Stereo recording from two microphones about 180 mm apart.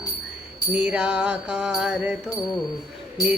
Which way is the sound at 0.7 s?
5° right (ahead or behind).